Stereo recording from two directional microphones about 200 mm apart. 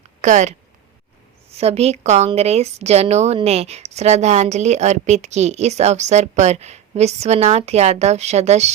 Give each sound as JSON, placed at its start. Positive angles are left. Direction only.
{"t": 0.2, "sound": "speech", "side_deg": -35}
{"t": 1.5, "sound": "a woman's voice", "side_deg": -30}